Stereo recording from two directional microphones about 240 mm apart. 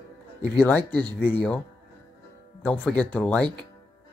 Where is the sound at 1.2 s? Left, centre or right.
Centre.